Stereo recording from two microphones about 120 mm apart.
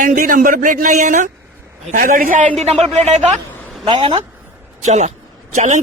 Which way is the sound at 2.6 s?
65° right (ahead or behind).